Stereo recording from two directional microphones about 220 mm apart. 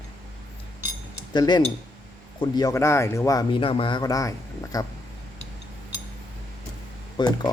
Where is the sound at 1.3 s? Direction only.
20° left (ahead or behind).